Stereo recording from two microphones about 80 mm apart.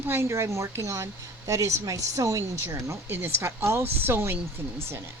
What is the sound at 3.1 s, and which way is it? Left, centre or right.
Speech, right.